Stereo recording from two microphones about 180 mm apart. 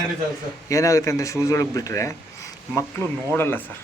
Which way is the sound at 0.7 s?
15° left (ahead or behind).